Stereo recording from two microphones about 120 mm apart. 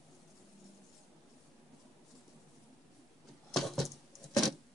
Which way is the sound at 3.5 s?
Centre (ahead or behind).